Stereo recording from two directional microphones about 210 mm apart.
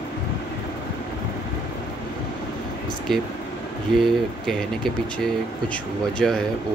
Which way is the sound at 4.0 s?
Centre (ahead or behind).